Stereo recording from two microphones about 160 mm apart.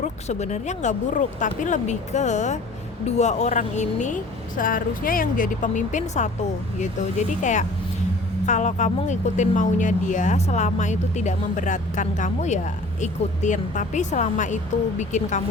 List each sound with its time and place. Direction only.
0.0 s speech: 45° left (ahead or behind)